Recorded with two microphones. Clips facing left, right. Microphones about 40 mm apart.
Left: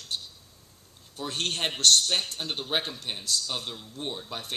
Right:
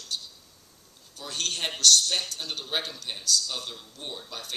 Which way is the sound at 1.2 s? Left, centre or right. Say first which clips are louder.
Left 2 dB; left.